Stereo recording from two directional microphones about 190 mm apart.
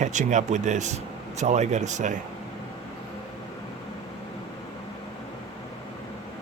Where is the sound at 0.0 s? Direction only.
40° right (ahead or behind).